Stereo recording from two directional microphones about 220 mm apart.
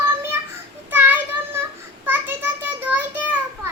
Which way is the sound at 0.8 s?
10° right (ahead or behind).